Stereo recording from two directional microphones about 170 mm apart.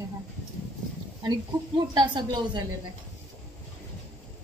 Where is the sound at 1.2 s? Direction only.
25° right (ahead or behind).